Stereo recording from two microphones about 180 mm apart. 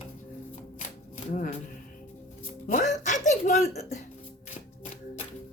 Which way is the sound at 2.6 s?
45° left (ahead or behind).